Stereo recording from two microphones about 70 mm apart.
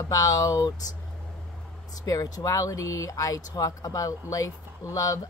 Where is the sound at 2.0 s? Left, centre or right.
Left.